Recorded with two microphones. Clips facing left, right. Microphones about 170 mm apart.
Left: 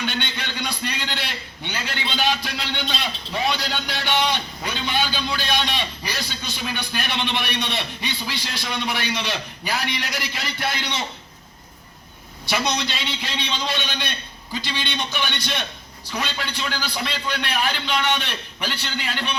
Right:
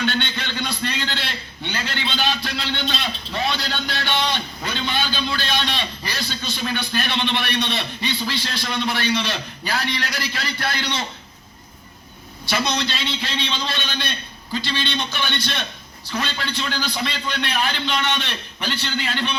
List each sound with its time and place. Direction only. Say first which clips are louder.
0.0 s a sound: right 4 dB; 10° left (ahead or behind)
8.7 s a man's voice: right 4 dB; 15° left (ahead or behind)
12.5 s a man's voice: right 1 dB; 15° left (ahead or behind)